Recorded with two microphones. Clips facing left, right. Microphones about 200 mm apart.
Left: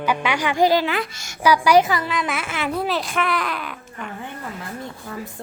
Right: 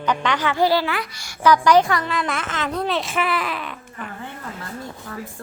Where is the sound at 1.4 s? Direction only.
10° left (ahead or behind).